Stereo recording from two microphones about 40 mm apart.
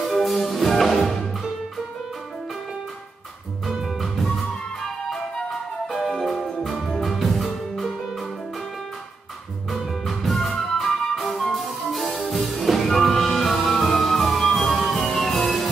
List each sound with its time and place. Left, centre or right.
0.2 s music: centre
3.8 s music: centre
4.2 s music: centre
6.4 s music: centre
9.7 s music: centre
12.7 s music: centre
13.0 s music: centre